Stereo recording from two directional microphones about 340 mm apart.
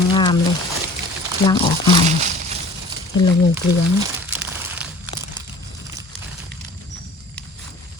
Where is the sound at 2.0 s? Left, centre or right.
Centre.